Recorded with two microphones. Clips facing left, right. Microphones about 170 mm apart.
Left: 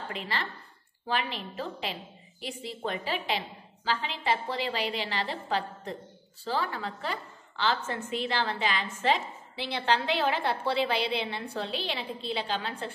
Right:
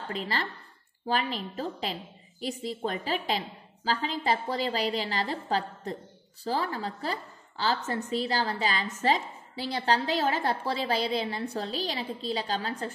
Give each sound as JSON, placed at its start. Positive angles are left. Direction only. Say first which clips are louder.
{"t": 0.1, "sound": "a woman's voice", "louder": "right 4 dB", "side_deg": -35}